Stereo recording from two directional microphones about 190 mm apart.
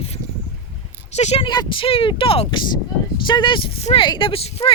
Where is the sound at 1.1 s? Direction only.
35° left (ahead or behind).